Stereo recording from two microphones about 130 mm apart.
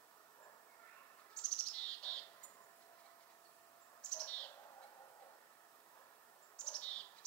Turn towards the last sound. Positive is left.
turn(degrees=10)  # may be behind; listen again after turning